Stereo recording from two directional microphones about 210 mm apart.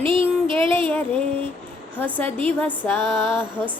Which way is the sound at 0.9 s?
10° left (ahead or behind).